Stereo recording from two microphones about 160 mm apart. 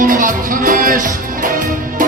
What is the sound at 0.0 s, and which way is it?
Music, 55° right (ahead or behind).